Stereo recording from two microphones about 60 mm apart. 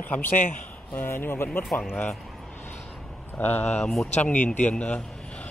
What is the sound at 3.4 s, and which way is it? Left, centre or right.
A man's voice, left.